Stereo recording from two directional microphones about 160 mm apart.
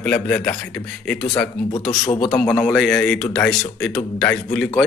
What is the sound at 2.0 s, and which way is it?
Speech, 25° left (ahead or behind).